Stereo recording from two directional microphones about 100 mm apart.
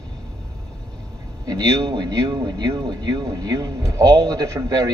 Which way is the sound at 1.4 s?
40° right (ahead or behind).